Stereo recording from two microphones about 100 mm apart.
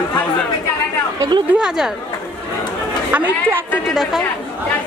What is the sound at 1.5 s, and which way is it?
Speech, 15° right (ahead or behind).